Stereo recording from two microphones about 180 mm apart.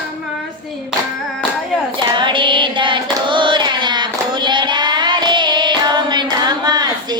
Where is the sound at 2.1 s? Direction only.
25° right (ahead or behind).